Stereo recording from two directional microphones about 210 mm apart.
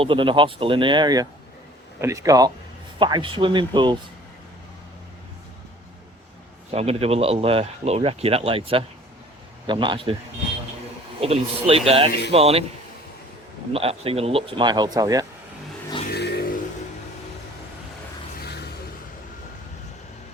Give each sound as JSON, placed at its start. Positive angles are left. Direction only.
{"t": 0.0, "sound": "speech", "side_deg": -25}
{"t": 6.7, "sound": "speech", "side_deg": -30}
{"t": 11.2, "sound": "speech", "side_deg": -30}
{"t": 13.7, "sound": "speech", "side_deg": -25}
{"t": 16.1, "sound": "a sound", "side_deg": 50}
{"t": 18.3, "sound": "a sound", "side_deg": 50}